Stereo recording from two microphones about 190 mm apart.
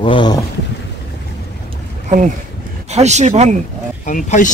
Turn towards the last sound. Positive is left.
turn(degrees=40)  # may be behind; listen again after turning